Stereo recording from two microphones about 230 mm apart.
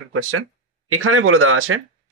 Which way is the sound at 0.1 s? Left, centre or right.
Right.